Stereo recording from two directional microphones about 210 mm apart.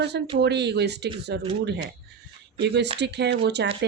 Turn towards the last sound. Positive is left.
turn(degrees=-50)  # may be behind; listen again after turning